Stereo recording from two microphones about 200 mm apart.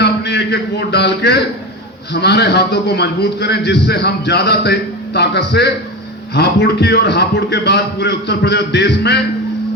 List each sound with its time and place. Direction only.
0.0 s a man's voice: 55° left (ahead or behind)